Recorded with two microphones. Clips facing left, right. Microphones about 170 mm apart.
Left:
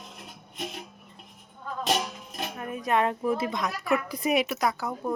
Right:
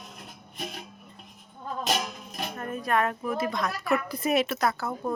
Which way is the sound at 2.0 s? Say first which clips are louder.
Left 1 dB; 5° left (ahead or behind).